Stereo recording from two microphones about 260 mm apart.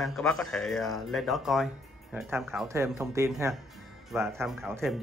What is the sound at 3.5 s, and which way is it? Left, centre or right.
Speech, centre.